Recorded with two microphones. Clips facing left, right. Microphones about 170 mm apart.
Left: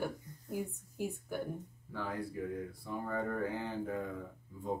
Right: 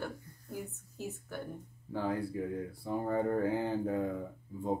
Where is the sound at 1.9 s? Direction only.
30° right (ahead or behind).